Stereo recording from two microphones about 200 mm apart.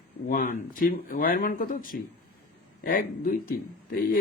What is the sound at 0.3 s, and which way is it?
Speech, 40° left (ahead or behind).